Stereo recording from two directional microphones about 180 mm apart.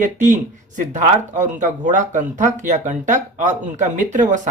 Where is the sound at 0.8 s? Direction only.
45° right (ahead or behind).